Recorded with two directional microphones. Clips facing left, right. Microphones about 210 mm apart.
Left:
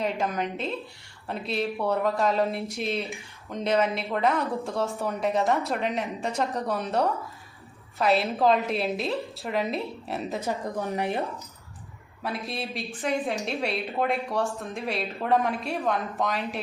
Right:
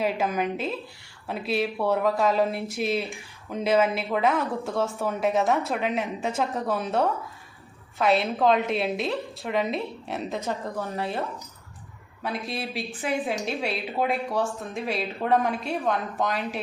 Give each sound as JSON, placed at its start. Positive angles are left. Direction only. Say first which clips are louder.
{"t": 0.0, "sound": "speech", "louder": "right 2 dB", "side_deg": -5}
{"t": 10.5, "sound": "speech", "louder": "left 1 dB", "side_deg": 15}
{"t": 12.2, "sound": "speech", "louder": "right 1 dB", "side_deg": 0}